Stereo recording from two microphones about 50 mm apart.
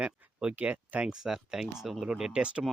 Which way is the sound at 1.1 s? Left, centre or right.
Centre.